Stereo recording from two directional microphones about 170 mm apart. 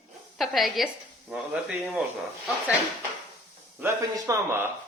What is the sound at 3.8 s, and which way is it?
Speech, 20° right (ahead or behind).